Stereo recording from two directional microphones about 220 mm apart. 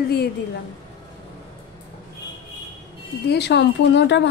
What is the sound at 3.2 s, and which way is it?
A woman's voice, 50° left (ahead or behind).